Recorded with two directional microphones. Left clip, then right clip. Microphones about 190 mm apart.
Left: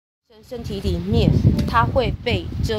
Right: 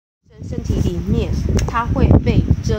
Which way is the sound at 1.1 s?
55° left (ahead or behind).